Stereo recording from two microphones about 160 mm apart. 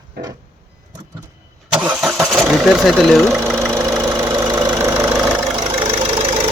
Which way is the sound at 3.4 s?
15° right (ahead or behind).